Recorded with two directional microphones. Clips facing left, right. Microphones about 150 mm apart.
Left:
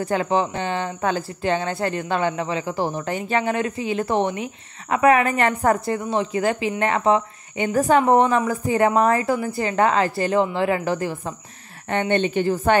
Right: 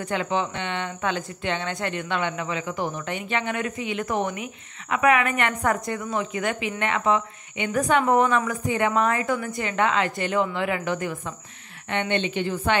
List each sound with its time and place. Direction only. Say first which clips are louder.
0.0 s a woman's voice: left 5 dB; 35° left (ahead or behind)